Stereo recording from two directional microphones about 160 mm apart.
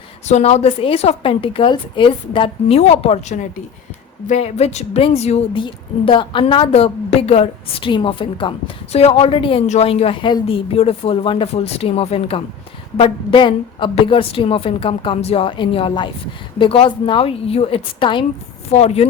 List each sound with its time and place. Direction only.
0.3 s a woman's voice: 45° left (ahead or behind)